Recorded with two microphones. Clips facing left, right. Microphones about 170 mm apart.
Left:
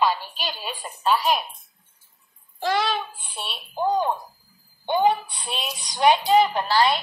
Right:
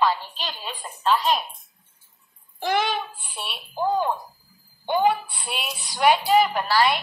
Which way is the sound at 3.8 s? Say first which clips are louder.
Left 1 dB; 20° left (ahead or behind).